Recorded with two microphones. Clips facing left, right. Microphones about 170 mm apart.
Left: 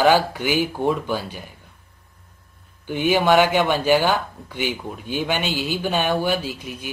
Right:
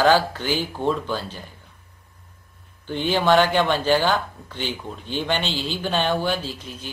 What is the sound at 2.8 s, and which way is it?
Speech, 10° left (ahead or behind).